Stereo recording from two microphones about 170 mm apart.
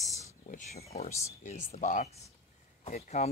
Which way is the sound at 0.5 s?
45° left (ahead or behind).